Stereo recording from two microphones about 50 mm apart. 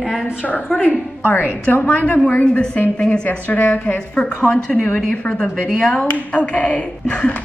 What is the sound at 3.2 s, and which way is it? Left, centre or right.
A woman's voice, left.